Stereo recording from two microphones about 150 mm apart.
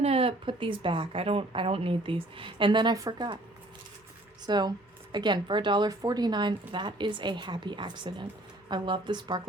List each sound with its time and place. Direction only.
0.0 s speech: 40° right (ahead or behind)
4.4 s a woman's voice: 30° right (ahead or behind)